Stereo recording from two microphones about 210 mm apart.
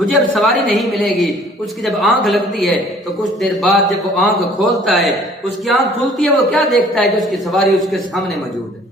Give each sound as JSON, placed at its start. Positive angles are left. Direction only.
{"t": 0.0, "sound": "a woman's voice", "side_deg": 0}